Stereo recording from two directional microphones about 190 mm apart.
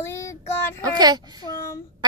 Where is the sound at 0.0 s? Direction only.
15° left (ahead or behind).